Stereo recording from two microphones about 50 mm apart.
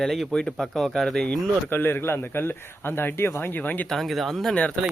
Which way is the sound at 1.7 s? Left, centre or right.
Left.